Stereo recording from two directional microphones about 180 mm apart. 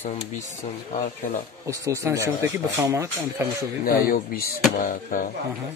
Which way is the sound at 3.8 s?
55° left (ahead or behind).